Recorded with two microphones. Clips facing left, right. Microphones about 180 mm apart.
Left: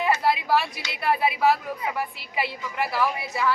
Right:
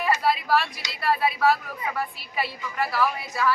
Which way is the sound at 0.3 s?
20° left (ahead or behind).